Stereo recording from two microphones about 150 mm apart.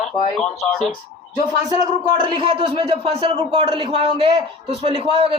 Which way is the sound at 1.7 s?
25° right (ahead or behind).